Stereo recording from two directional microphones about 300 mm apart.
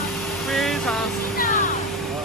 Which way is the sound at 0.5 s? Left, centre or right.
Centre.